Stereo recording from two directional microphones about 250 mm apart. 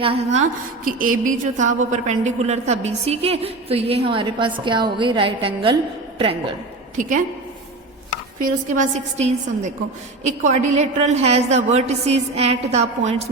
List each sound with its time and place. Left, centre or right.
0.0 s a woman's voice: right
6.9 s a woman's voice: right
8.4 s a woman's voice: right